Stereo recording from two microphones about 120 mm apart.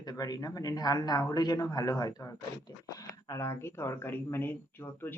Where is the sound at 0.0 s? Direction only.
35° left (ahead or behind).